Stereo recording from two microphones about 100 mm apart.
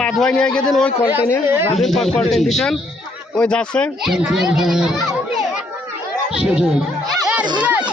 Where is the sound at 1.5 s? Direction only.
25° right (ahead or behind).